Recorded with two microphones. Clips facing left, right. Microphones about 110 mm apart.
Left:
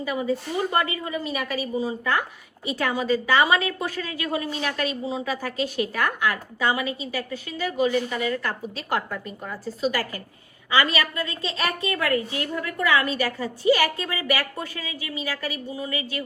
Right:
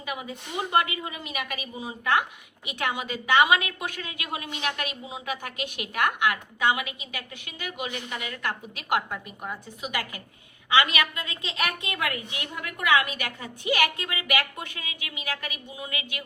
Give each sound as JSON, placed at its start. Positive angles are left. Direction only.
{"t": 0.0, "sound": "a woman's voice", "side_deg": -15}